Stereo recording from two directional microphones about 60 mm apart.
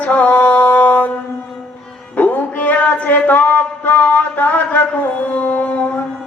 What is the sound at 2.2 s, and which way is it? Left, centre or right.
Music, left.